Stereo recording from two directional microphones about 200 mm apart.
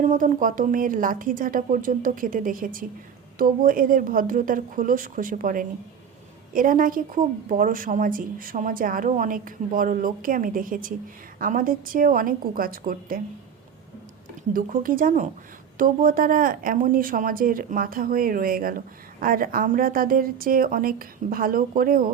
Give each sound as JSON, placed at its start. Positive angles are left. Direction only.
{"t": 0.0, "sound": "a woman's voice", "side_deg": -40}
{"t": 14.5, "sound": "a woman's voice", "side_deg": -45}